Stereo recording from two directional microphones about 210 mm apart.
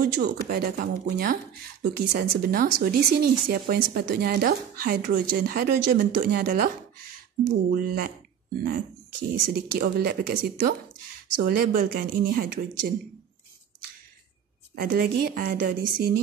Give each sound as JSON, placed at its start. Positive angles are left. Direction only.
{"t": 0.0, "sound": "speech", "side_deg": -50}
{"t": 7.7, "sound": "speech", "side_deg": -45}
{"t": 9.3, "sound": "speech", "side_deg": -45}
{"t": 14.8, "sound": "speech", "side_deg": -45}